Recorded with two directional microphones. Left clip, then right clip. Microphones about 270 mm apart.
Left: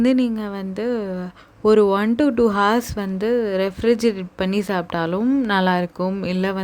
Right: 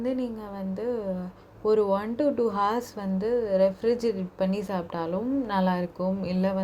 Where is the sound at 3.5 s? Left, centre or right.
Left.